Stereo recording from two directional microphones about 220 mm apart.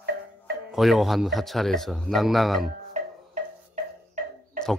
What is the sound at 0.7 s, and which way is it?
Speech, centre (ahead or behind).